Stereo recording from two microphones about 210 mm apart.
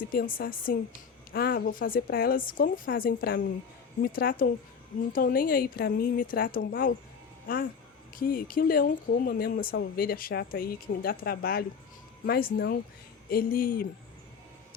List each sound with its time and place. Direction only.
0.0 s a woman's voice: 45° left (ahead or behind)